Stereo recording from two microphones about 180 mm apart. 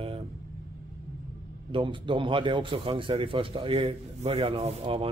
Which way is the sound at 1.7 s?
25° right (ahead or behind).